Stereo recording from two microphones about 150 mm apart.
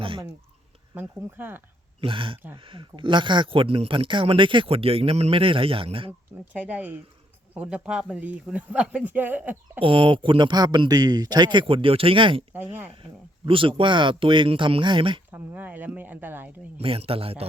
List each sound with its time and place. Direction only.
0.9 s speech: 15° right (ahead or behind)
2.0 s speech: 35° right (ahead or behind)
6.1 s speech: 10° right (ahead or behind)
9.8 s speech: 35° right (ahead or behind)
12.5 s speech: 15° right (ahead or behind)
13.4 s speech: 35° right (ahead or behind)
15.3 s speech: 10° right (ahead or behind)
16.7 s speech: 40° right (ahead or behind)